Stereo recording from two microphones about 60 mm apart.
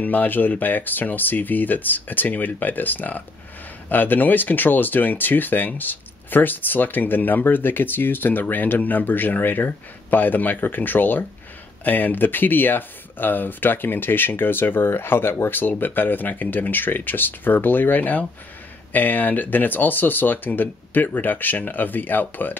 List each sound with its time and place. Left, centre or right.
0.0 s speech: left